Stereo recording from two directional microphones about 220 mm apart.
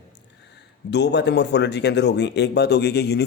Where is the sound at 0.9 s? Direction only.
50° left (ahead or behind).